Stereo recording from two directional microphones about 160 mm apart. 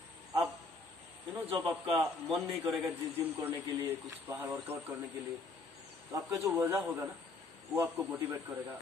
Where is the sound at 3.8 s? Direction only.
15° right (ahead or behind).